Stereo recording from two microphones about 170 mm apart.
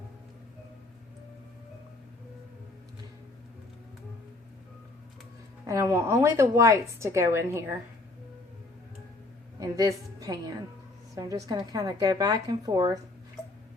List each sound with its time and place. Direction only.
5.6 s a woman's voice: 20° right (ahead or behind)
9.6 s a woman's voice: 20° right (ahead or behind)